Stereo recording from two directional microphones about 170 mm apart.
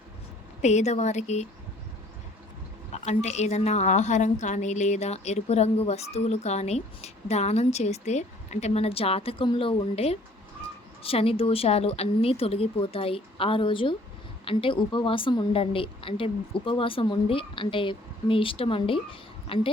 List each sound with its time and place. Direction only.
0.6 s a woman's voice: 40° left (ahead or behind)
2.9 s a woman's voice: 40° left (ahead or behind)